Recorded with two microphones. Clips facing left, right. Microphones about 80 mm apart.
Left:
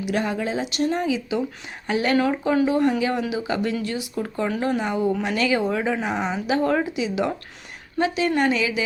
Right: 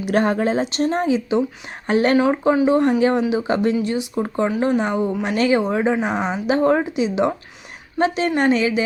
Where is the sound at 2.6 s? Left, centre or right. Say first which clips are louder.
Right 5 dB; right.